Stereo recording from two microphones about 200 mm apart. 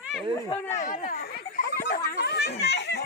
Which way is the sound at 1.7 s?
55° left (ahead or behind).